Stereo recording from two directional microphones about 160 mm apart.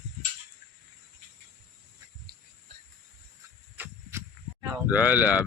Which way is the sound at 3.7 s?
15° right (ahead or behind).